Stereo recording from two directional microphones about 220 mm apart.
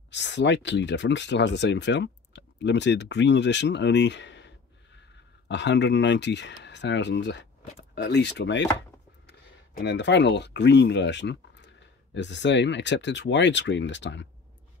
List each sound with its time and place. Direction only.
0.1 s speech: 55° left (ahead or behind)
9.8 s speech: 50° left (ahead or behind)